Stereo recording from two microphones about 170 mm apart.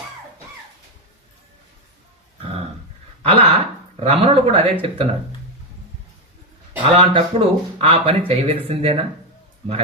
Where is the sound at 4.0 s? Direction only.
35° right (ahead or behind).